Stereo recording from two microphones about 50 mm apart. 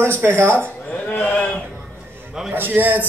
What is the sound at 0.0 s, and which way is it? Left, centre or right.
Speech, right.